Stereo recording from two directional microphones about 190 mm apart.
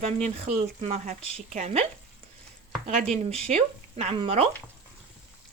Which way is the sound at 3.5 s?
35° right (ahead or behind).